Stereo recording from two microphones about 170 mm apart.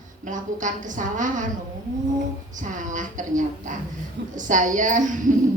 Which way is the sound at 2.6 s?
50° right (ahead or behind).